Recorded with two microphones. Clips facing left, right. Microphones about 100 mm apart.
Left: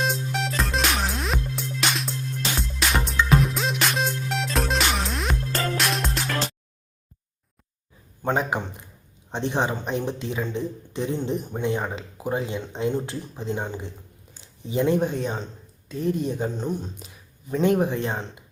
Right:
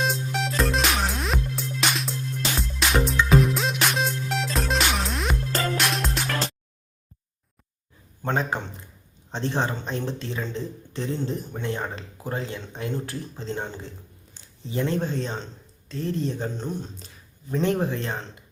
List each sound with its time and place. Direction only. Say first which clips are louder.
0.0 s music: even; centre (ahead or behind)
8.2 s speech: left 2 dB; 10° left (ahead or behind)